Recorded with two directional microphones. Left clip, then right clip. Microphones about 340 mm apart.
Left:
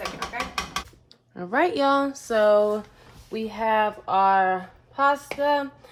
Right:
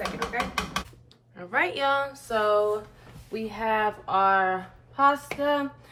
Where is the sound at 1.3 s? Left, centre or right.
Centre.